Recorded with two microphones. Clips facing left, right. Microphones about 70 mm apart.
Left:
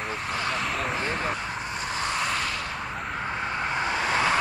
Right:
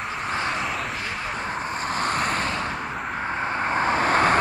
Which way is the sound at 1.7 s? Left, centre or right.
Right.